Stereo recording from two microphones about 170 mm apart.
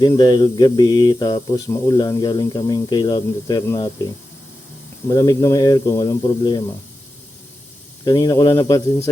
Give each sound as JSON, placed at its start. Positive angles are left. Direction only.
{"t": 0.0, "sound": "mantra", "side_deg": 25}
{"t": 5.0, "sound": "mantra", "side_deg": 20}
{"t": 8.0, "sound": "mantra", "side_deg": 25}